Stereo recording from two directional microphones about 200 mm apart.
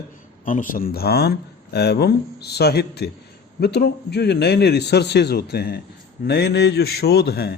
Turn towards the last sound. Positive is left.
turn(degrees=55)  # may be behind; listen again after turning